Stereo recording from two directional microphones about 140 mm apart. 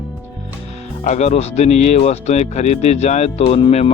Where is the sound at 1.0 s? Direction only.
55° left (ahead or behind).